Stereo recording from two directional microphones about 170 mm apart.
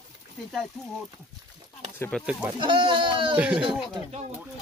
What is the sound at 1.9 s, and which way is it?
Speech, 15° left (ahead or behind).